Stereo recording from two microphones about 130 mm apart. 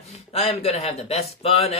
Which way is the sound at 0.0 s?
55° left (ahead or behind).